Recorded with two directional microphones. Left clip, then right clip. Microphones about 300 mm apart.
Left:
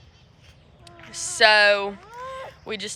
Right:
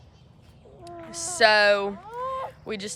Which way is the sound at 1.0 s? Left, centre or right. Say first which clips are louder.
Left 2 dB; centre.